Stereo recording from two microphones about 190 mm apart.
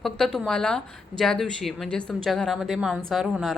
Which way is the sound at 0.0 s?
Centre (ahead or behind).